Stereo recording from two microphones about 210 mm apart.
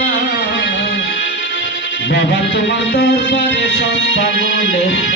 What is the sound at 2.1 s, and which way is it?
Music, 55° left (ahead or behind).